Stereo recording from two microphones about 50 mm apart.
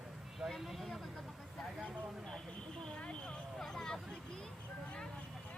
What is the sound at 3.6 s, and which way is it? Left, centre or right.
Vehicle, centre.